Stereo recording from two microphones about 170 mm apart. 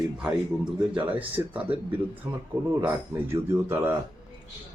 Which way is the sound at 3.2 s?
15° right (ahead or behind).